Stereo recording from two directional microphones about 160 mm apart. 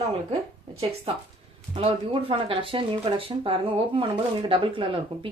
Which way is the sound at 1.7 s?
35° right (ahead or behind).